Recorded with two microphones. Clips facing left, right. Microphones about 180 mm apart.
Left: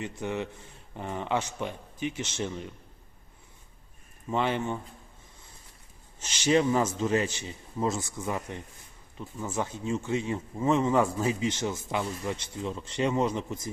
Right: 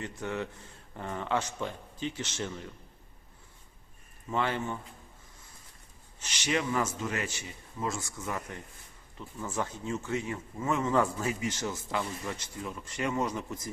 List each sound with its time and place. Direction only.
0.0 s speech: 20° left (ahead or behind)
4.3 s speech: 20° left (ahead or behind)
6.2 s speech: 30° left (ahead or behind)